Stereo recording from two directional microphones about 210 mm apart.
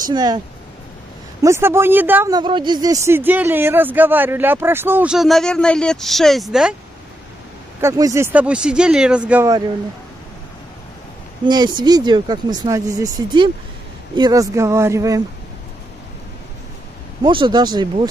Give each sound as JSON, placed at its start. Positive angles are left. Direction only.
{"t": 0.1, "sound": "speech", "side_deg": -20}
{"t": 1.4, "sound": "speech", "side_deg": -10}
{"t": 2.3, "sound": "speech", "side_deg": -20}
{"t": 7.8, "sound": "speech", "side_deg": -15}
{"t": 11.4, "sound": "speech", "side_deg": -20}
{"t": 17.2, "sound": "speech", "side_deg": -20}